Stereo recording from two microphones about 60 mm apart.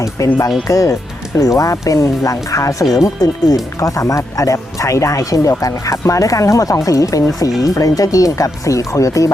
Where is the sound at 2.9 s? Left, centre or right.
Left.